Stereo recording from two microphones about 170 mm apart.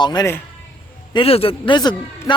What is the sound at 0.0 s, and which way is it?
A man's voice, 25° left (ahead or behind).